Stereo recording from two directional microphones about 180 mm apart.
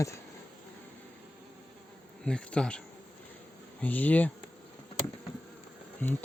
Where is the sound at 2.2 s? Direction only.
5° left (ahead or behind).